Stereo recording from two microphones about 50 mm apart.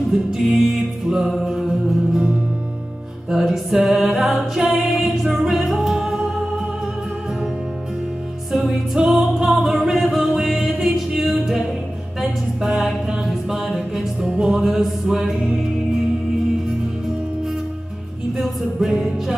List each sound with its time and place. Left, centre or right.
0.1 s music: centre
3.3 s music: centre
8.5 s music: centre
18.4 s music: centre